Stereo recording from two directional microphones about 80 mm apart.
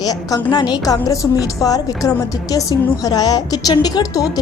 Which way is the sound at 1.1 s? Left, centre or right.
Left.